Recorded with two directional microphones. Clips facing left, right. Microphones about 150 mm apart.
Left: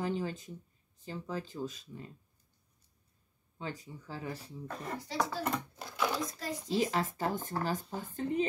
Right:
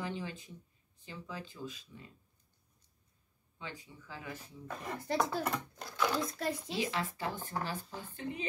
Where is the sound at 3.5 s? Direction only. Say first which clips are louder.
Left 6 dB; 40° left (ahead or behind).